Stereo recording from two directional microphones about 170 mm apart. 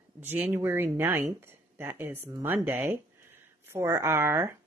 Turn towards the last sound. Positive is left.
turn(degrees=-15)  # may be behind; listen again after turning